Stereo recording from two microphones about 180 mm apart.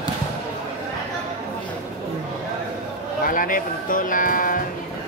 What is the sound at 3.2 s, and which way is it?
Speech, 50° left (ahead or behind).